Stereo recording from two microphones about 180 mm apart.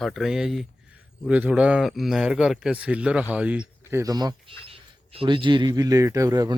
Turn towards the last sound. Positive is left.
turn(degrees=-20)  # may be behind; listen again after turning